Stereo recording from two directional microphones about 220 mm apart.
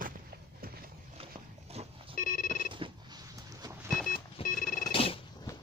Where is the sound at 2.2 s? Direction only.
40° left (ahead or behind).